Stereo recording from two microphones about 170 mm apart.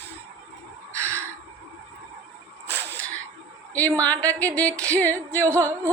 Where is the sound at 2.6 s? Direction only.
10° left (ahead or behind).